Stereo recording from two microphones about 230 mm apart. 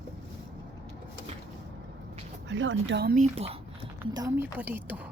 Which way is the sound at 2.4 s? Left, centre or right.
Right.